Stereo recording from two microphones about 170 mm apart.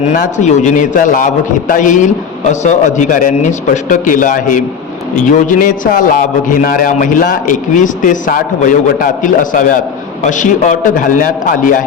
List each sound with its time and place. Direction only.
0.0 s a man's voice: 45° left (ahead or behind)